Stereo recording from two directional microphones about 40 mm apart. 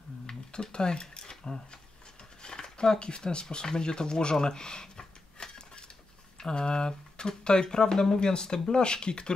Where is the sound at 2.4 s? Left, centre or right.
Centre.